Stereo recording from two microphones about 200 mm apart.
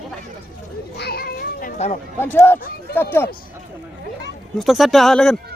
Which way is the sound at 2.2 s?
10° left (ahead or behind).